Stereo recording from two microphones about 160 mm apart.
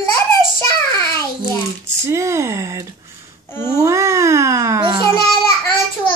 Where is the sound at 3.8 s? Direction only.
20° right (ahead or behind).